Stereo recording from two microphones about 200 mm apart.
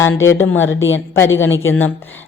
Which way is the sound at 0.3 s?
75° left (ahead or behind).